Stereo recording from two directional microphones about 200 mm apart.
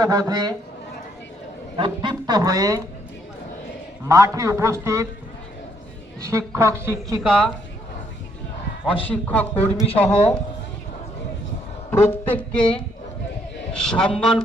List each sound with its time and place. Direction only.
0.0 s speech: 20° right (ahead or behind)
1.7 s speech: 25° right (ahead or behind)
4.0 s a man's voice: 15° right (ahead or behind)
6.2 s a man's voice: 15° right (ahead or behind)
9.0 s a woman's voice: 10° left (ahead or behind)
11.9 s a woman's voice: 10° left (ahead or behind)
13.7 s a man's voice: 5° left (ahead or behind)